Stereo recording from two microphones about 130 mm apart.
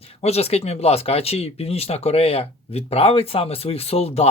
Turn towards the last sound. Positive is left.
turn(degrees=50)  # may be behind; listen again after turning